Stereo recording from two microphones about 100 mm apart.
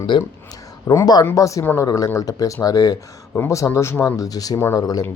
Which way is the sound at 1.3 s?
35° left (ahead or behind).